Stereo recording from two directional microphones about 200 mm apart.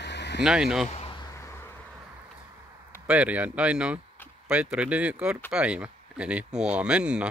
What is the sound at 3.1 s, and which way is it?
Speech, 5° right (ahead or behind).